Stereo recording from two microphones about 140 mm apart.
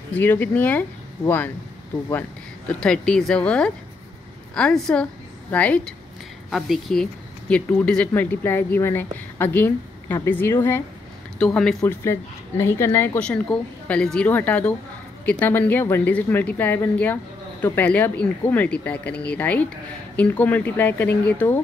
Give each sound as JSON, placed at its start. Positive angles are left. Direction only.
{"t": 0.1, "sound": "speech", "side_deg": 15}
{"t": 2.7, "sound": "a woman's voice", "side_deg": 5}
{"t": 11.3, "sound": "speech", "side_deg": 5}
{"t": 11.8, "sound": "speech", "side_deg": 15}